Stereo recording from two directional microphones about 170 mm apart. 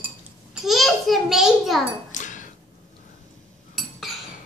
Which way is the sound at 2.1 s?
45° left (ahead or behind).